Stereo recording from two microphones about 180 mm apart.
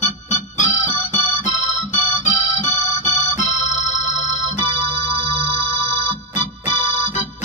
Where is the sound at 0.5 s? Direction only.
40° left (ahead or behind).